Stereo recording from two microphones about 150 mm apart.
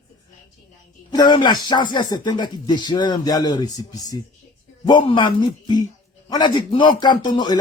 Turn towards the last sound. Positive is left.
turn(degrees=30)  # may be behind; listen again after turning